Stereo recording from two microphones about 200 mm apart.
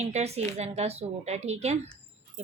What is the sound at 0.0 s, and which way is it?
A woman's voice, 35° right (ahead or behind).